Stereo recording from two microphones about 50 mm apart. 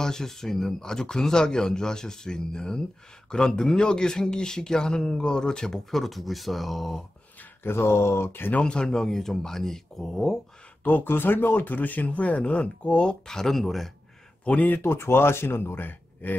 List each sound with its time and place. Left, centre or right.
0.0 s speech: centre
7.6 s speech: left
8.5 s speech: centre
10.8 s speech: left; by 13.2 s centre
13.3 s speech: centre
14.4 s speech: left
14.7 s speech: left